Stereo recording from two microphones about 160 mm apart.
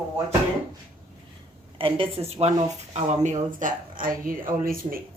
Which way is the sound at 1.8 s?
35° right (ahead or behind).